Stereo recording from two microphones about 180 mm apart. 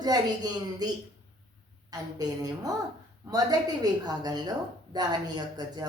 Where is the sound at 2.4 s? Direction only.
20° right (ahead or behind).